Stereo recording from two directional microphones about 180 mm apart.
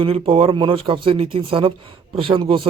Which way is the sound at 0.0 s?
30° right (ahead or behind).